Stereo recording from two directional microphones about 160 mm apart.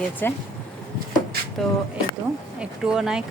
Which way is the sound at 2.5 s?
5° right (ahead or behind).